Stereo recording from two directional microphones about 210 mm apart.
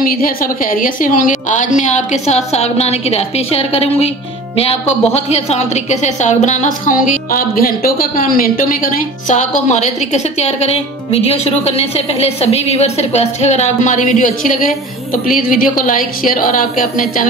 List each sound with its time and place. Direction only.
0.0 s a woman's voice: 40° left (ahead or behind)